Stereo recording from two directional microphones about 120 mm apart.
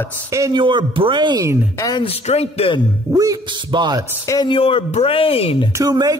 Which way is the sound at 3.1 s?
30° right (ahead or behind).